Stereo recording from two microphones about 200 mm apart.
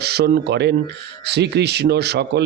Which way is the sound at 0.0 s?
55° right (ahead or behind).